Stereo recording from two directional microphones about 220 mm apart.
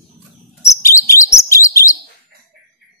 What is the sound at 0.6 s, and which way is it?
Chirp, 15° left (ahead or behind).